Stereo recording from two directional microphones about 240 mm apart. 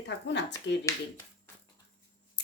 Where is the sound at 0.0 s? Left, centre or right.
Left.